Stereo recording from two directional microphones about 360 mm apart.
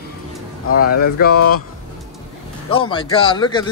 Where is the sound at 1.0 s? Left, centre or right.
Left.